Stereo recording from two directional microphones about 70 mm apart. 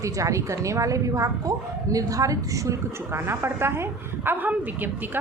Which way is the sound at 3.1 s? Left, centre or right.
Right.